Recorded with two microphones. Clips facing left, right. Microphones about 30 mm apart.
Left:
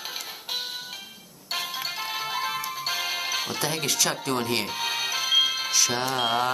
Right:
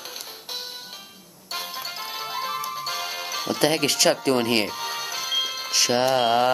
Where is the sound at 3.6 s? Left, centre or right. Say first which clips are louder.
Right 9 dB; right.